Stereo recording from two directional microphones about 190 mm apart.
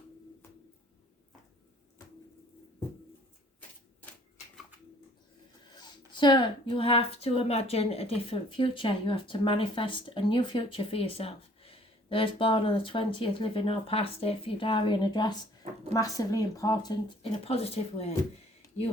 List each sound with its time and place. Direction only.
6.1 s a woman's voice: 25° left (ahead or behind)
17.4 s speech: 30° left (ahead or behind)